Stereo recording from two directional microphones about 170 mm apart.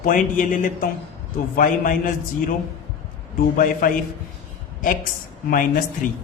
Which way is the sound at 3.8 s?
50° left (ahead or behind).